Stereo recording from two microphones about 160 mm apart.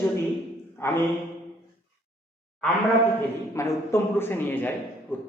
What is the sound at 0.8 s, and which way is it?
Speech, 15° left (ahead or behind).